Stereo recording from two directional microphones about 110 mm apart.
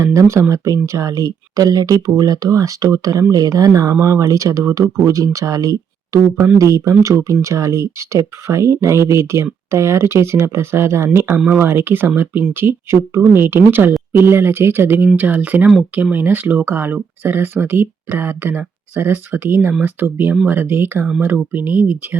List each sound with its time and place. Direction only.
0.0 s speech: 25° right (ahead or behind)